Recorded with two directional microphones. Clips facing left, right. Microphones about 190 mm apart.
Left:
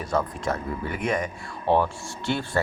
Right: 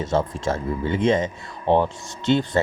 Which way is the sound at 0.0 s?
25° right (ahead or behind).